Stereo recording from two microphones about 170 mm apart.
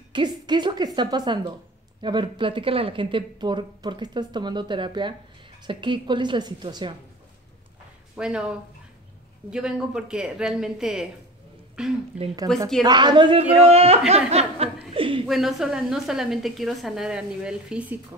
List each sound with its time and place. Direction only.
0.1 s speech: 25° right (ahead or behind)
8.2 s a woman's voice: 5° right (ahead or behind)
12.8 s speech: 25° right (ahead or behind)
15.0 s a sound: 30° right (ahead or behind)
15.2 s a woman's voice: centre (ahead or behind)